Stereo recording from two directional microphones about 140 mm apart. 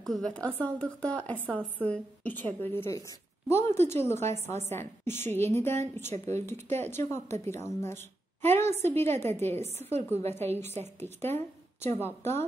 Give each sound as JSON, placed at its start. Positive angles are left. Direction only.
{"t": 0.0, "sound": "a woman's voice", "side_deg": 5}
{"t": 6.1, "sound": "speech", "side_deg": -55}
{"t": 6.8, "sound": "a woman's voice", "side_deg": 15}